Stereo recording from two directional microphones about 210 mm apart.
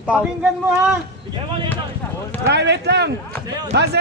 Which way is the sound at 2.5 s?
55° right (ahead or behind).